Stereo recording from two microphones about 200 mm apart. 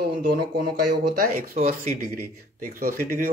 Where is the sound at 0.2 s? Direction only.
50° right (ahead or behind).